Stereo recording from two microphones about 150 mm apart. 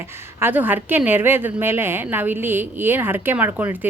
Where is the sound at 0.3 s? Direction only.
15° right (ahead or behind).